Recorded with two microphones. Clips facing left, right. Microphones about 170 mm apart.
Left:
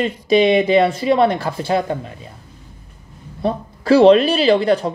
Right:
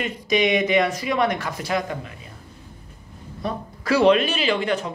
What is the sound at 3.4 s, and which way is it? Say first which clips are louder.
A woman's voice: left 7 dB; 30° left (ahead or behind).